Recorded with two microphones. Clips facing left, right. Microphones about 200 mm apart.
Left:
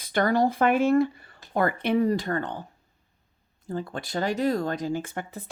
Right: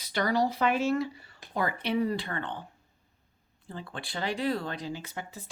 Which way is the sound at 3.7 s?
45° left (ahead or behind).